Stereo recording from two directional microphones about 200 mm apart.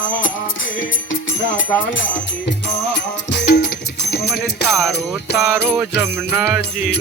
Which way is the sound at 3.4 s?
55° left (ahead or behind).